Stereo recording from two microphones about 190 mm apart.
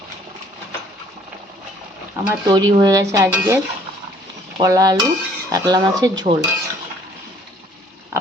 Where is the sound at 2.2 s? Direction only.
15° right (ahead or behind).